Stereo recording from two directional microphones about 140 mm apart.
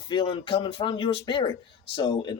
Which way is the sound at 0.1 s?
35° left (ahead or behind).